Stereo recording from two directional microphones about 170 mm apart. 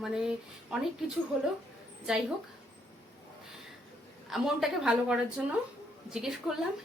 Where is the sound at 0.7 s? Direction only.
5° right (ahead or behind).